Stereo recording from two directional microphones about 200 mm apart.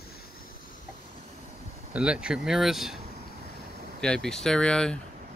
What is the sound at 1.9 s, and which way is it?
Speech, 5° right (ahead or behind).